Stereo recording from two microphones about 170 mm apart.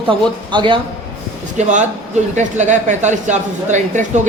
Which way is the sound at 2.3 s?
45° right (ahead or behind).